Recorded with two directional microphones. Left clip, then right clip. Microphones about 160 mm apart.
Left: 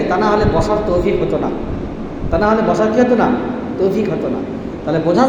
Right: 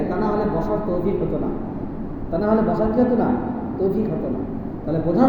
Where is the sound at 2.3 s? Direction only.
40° left (ahead or behind).